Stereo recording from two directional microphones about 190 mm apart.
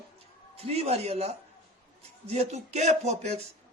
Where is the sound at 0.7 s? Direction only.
35° right (ahead or behind).